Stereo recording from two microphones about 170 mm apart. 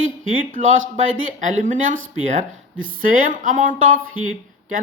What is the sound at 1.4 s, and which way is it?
Speech, 50° right (ahead or behind).